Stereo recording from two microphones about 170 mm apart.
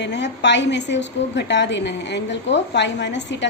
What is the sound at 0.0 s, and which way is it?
A woman's voice, 90° left.